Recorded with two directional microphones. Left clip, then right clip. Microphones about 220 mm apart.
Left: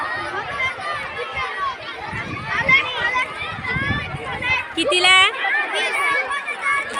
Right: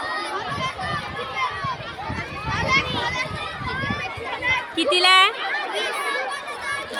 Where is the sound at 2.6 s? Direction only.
55° right (ahead or behind).